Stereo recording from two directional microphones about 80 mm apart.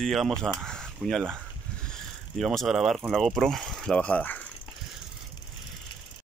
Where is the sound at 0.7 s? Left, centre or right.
Centre.